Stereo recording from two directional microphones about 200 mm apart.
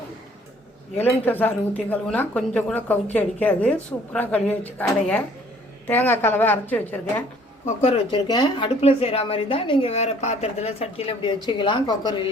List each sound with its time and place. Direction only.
0.9 s speech: 10° left (ahead or behind)
7.8 s a woman's voice: 25° left (ahead or behind)